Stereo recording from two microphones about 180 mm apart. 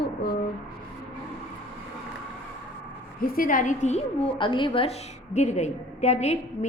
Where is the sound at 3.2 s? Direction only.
50° left (ahead or behind).